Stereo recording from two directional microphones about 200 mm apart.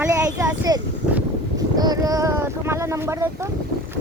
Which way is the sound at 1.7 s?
20° right (ahead or behind).